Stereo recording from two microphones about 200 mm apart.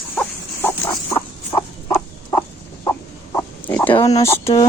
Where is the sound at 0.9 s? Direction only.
25° left (ahead or behind).